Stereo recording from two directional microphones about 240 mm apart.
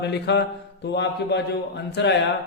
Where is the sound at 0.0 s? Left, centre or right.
Left.